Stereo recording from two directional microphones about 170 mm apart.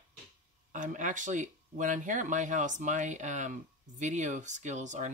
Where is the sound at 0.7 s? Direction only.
50° right (ahead or behind).